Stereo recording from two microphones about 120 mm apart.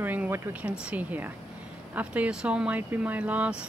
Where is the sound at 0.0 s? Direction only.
15° right (ahead or behind).